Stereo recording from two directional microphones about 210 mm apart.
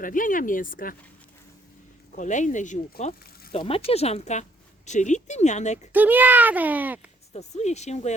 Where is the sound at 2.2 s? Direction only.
35° left (ahead or behind).